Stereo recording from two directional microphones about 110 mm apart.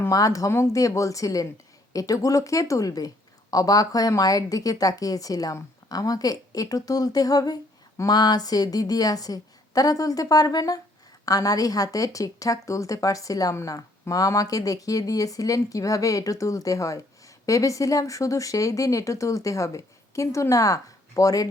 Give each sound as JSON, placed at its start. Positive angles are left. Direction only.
{"t": 0.1, "sound": "a woman's voice", "side_deg": 30}